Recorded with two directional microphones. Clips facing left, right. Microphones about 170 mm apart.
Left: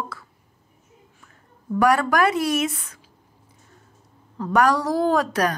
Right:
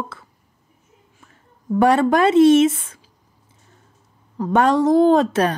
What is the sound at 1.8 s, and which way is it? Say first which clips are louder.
A woman's voice: right 4 dB; 25° right (ahead or behind).